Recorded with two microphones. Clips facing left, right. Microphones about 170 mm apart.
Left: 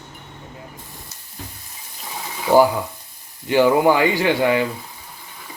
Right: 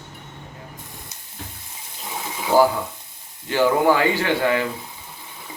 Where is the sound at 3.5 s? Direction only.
15° left (ahead or behind).